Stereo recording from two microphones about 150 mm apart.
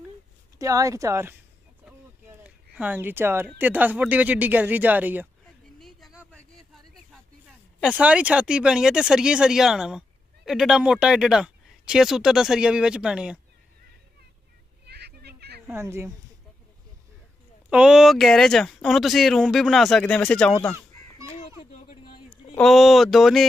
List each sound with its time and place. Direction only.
0.6 s speech: 20° right (ahead or behind)
1.9 s a sound: 10° right (ahead or behind)
3.5 s speech: 10° right (ahead or behind)
5.8 s a sound: centre (ahead or behind)
6.9 s speech: centre (ahead or behind)
14.9 s a sound: 90° right
15.7 s speech: 20° right (ahead or behind)
17.6 s speech: 5° right (ahead or behind)
22.6 s speech: centre (ahead or behind)